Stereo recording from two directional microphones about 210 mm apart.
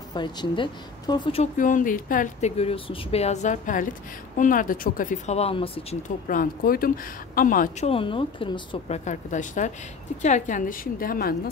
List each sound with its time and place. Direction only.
0.1 s a woman's voice: 20° left (ahead or behind)
1.6 s speech: 40° left (ahead or behind)
6.2 s speech: 40° left (ahead or behind)
7.9 s speech: 25° left (ahead or behind); by 11.5 s 45° left (ahead or behind)